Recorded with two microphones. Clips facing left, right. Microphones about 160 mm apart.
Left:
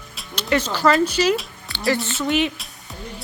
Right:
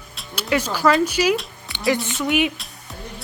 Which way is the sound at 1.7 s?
20° right (ahead or behind).